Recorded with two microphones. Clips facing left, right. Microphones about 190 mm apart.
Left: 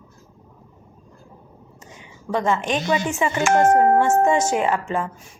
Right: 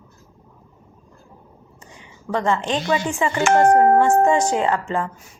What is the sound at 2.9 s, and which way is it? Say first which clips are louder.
A woman's voice: right 1 dB; 20° left (ahead or behind).